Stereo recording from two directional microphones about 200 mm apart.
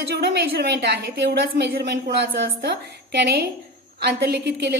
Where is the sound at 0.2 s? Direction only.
55° right (ahead or behind).